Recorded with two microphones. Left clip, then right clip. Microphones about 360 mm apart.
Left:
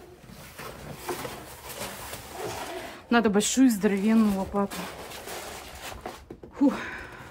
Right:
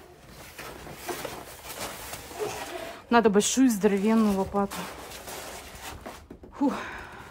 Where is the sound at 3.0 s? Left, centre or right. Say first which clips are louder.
Right 2 dB; centre.